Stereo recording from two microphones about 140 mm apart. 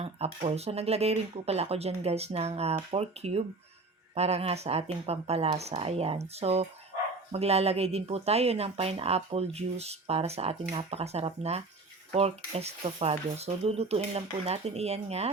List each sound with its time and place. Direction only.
0.0 s speech: 45° right (ahead or behind)